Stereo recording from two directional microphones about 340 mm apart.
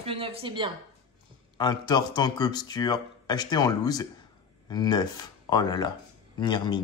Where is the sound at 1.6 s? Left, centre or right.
Centre.